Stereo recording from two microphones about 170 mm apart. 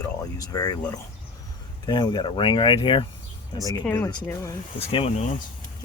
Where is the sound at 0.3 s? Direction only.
20° left (ahead or behind).